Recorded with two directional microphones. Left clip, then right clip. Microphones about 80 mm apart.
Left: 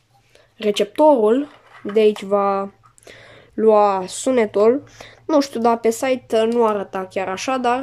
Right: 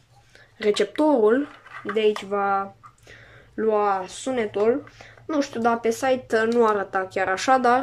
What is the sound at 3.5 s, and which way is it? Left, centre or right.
Speech, left.